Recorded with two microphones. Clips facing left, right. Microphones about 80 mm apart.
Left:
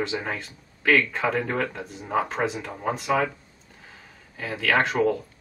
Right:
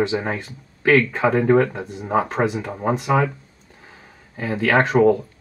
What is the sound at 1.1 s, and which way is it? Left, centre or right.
Speech, centre.